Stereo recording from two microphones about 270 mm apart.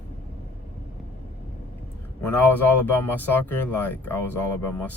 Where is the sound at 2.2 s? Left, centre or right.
Centre.